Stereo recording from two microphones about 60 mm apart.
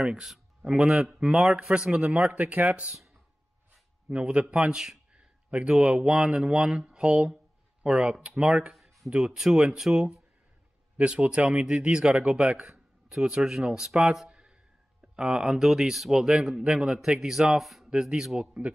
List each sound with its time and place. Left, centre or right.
0.2 s speech: centre
4.1 s speech: centre
8.7 s a sound: centre
9.1 s speech: centre
14.3 s a sound: centre
15.1 s speech: centre
17.8 s speech: centre